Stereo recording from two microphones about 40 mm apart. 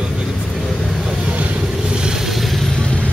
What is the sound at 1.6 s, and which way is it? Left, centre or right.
Vehicle, centre.